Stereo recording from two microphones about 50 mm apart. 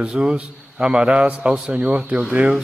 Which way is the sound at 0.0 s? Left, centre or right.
Centre.